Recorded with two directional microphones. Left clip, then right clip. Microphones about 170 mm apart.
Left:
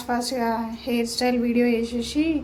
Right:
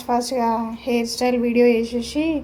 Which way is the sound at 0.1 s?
15° right (ahead or behind).